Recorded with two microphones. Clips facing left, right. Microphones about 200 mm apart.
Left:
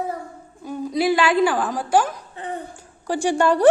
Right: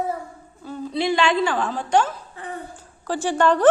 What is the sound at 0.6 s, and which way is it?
A woman's voice, 10° left (ahead or behind).